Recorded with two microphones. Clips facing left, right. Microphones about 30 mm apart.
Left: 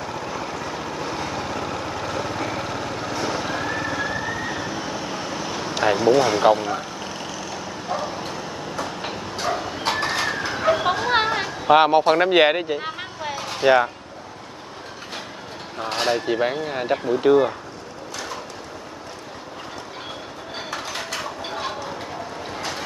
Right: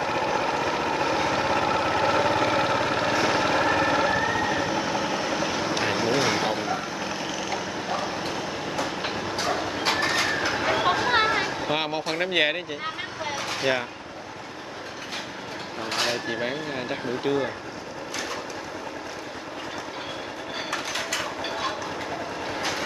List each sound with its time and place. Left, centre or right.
0.0 s vehicle: right
1.3 s vehicle: right
3.3 s vehicle: right
4.2 s vehicle: right
5.9 s speech: centre
7.9 s vehicle: centre
8.5 s train: centre
9.6 s train: centre
11.6 s speech: centre
13.2 s vehicle: centre
15.8 s a sound: centre
16.3 s speech: centre
20.7 s a sound: centre